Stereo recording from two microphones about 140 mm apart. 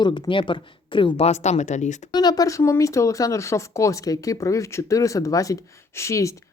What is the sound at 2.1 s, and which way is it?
Speech, 30° left (ahead or behind).